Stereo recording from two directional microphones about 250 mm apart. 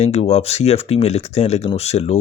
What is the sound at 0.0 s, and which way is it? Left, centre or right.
Speech, left.